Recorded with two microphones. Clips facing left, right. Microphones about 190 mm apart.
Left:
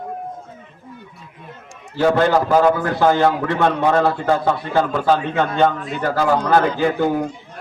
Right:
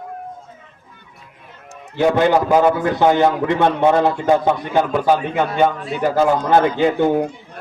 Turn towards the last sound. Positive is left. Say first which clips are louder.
# right 2 dB
turn(degrees=-20)  # may be behind; listen again after turning